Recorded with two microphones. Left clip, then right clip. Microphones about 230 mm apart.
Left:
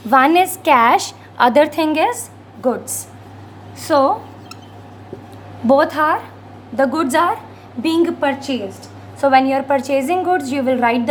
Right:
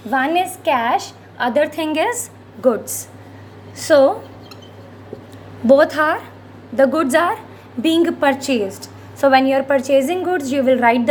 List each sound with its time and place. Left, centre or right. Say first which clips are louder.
0.1 s a woman's voice: left 5 dB; left; by 4.1 s centre
5.6 s a woman's voice: right 1 dB; centre
9.2 s a woman's voice: even; centre